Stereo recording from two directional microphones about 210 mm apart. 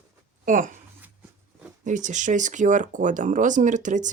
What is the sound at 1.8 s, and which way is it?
Speech, 35° right (ahead or behind).